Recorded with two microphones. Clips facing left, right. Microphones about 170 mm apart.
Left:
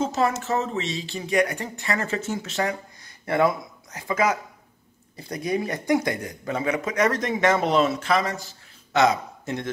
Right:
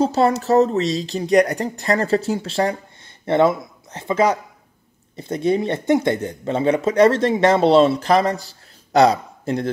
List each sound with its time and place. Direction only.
0.0 s speech: 35° right (ahead or behind)